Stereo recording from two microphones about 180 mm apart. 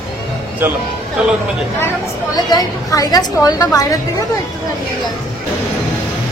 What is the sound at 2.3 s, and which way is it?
A woman's voice, 20° left (ahead or behind).